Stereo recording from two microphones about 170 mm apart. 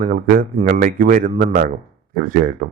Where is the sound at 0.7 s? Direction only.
55° right (ahead or behind).